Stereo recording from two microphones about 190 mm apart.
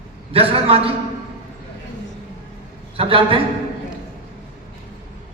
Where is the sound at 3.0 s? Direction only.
30° right (ahead or behind).